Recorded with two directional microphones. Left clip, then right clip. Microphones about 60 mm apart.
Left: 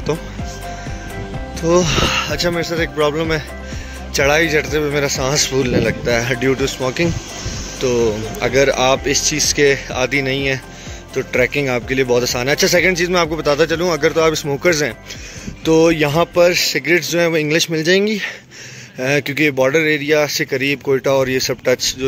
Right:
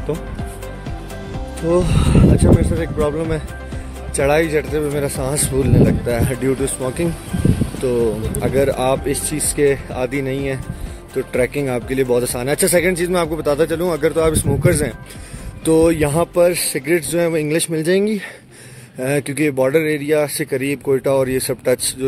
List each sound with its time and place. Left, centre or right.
1.7 s speech: centre
4.1 s speech: right
7.8 s speech: right
18.0 s speech: right
18.9 s speech: right